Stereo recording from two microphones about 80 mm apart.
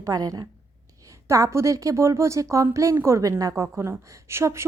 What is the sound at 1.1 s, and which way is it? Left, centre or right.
A woman's voice, right.